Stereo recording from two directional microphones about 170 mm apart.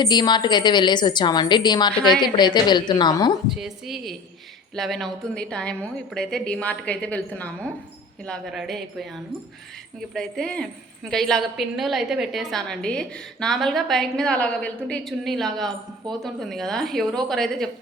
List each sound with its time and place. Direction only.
0.0 s a woman's voice: 25° left (ahead or behind)
1.9 s a woman's voice: 5° left (ahead or behind)
2.2 s a woman's voice: 25° left (ahead or behind)
3.5 s a woman's voice: centre (ahead or behind)
10.2 s a woman's voice: 5° left (ahead or behind)